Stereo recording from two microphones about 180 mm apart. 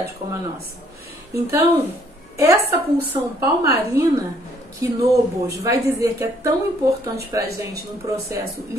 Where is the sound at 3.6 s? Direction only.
20° right (ahead or behind).